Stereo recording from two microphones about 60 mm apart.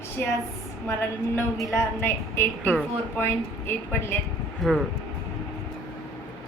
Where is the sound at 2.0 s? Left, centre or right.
Left.